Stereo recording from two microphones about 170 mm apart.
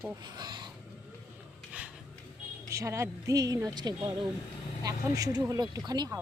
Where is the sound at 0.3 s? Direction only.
25° right (ahead or behind).